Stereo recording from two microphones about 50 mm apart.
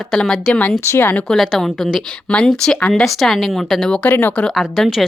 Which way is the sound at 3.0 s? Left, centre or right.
Centre.